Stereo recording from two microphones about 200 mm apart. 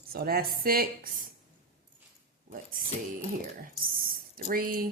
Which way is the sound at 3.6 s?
45° right (ahead or behind).